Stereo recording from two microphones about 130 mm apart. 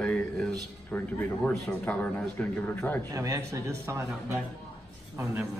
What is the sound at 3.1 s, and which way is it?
A man's voice, 25° right (ahead or behind).